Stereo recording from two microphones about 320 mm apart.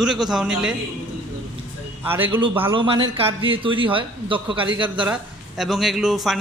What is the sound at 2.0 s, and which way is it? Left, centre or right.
Speech, centre.